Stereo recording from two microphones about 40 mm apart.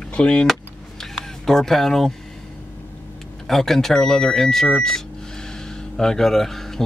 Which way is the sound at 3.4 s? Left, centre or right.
Centre.